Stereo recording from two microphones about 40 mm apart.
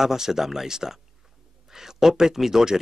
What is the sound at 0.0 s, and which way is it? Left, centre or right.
Speech, centre.